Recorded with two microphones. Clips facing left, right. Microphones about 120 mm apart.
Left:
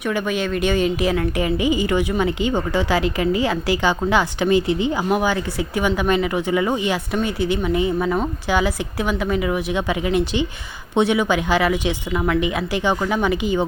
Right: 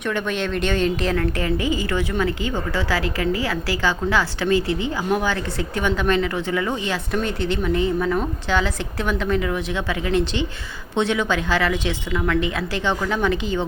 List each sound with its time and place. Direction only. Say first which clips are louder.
0.0 s a woman's voice: left 2 dB; 5° left (ahead or behind)